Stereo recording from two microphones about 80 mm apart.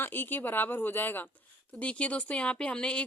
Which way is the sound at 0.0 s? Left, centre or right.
Left.